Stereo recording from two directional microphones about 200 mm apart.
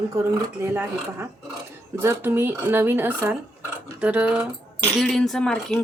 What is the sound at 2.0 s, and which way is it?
Speech, 10° right (ahead or behind).